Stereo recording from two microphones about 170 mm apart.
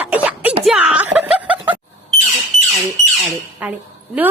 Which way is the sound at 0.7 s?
5° right (ahead or behind).